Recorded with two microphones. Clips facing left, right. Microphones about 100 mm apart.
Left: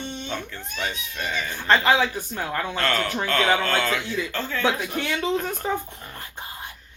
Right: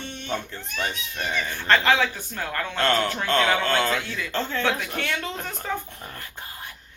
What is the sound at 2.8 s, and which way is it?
Speech, 25° right (ahead or behind).